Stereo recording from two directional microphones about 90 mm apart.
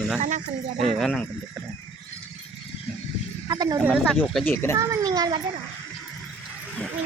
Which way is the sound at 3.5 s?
45° right (ahead or behind).